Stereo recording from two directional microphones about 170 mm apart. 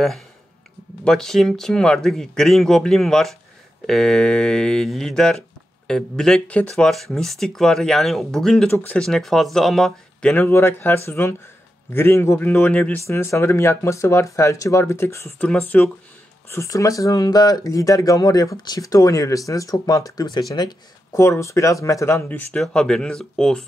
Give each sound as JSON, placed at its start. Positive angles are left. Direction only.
{"t": 1.0, "sound": "a man's voice", "side_deg": 5}